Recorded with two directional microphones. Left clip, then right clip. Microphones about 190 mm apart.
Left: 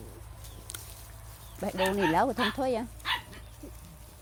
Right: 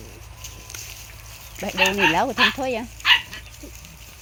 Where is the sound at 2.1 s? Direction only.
5° left (ahead or behind).